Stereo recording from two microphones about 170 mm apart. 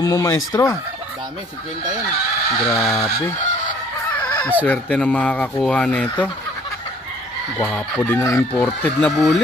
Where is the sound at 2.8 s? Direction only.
Centre (ahead or behind).